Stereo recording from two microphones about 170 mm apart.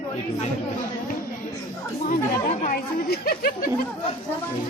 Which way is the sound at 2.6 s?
60° left (ahead or behind).